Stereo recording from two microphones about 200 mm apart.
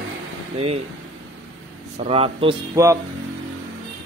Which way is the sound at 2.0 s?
30° right (ahead or behind).